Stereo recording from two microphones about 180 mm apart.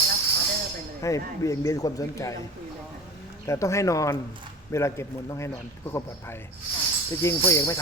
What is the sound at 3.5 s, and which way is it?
Speech, 15° left (ahead or behind).